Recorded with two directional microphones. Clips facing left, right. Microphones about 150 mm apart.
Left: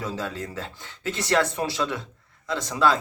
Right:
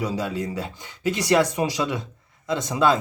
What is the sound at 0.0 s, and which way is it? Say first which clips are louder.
Speech: right 5 dB; 10° right (ahead or behind).